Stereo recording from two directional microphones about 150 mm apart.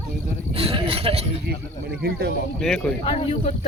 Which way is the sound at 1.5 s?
90° right.